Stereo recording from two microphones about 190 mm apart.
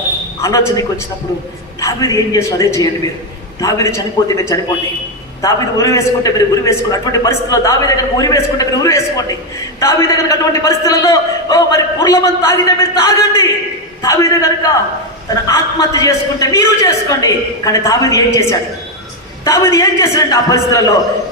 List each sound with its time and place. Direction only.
0.4 s a man's voice: 15° left (ahead or behind)